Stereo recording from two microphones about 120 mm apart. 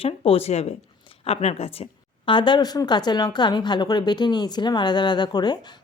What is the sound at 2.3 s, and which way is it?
A woman's voice, 40° left (ahead or behind).